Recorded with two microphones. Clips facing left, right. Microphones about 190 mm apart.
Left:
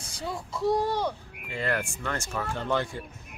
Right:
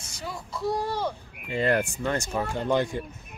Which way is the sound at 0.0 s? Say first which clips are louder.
Left 2 dB; 30° left (ahead or behind).